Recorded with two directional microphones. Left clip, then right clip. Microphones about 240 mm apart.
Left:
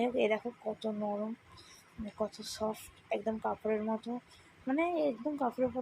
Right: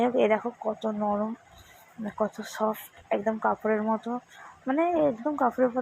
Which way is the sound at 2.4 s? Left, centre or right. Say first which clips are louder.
Right 8 dB; centre.